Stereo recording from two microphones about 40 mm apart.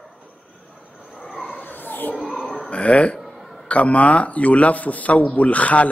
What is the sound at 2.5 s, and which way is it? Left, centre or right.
A man's voice, left.